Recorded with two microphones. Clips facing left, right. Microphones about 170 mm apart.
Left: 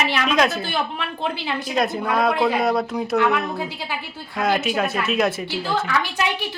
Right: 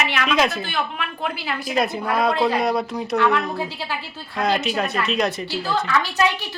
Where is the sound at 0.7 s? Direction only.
30° left (ahead or behind).